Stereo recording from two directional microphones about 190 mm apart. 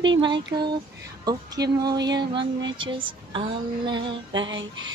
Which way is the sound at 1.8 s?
20° right (ahead or behind).